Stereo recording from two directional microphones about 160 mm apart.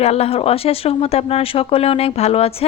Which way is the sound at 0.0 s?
40° left (ahead or behind).